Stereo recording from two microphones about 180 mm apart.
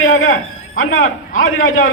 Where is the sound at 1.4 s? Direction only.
90° left.